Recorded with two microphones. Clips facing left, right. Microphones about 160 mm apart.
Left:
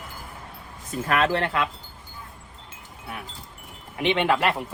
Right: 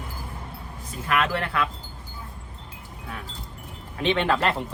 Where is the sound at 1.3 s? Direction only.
25° left (ahead or behind).